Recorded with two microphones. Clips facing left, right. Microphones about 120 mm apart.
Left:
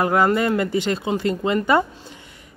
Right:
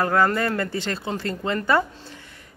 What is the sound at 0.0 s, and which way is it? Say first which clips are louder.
Speech: left 3 dB; 15° left (ahead or behind).